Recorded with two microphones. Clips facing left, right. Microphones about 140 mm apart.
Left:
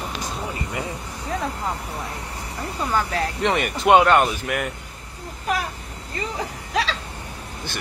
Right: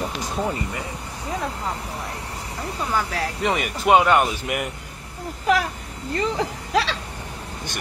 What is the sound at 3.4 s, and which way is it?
Speech, 5° right (ahead or behind).